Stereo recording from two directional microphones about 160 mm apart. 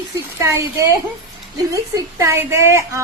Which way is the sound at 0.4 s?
15° right (ahead or behind).